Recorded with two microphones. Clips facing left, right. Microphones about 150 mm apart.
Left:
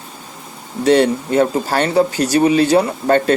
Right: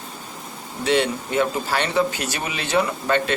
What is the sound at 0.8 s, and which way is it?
Speech, 40° left (ahead or behind).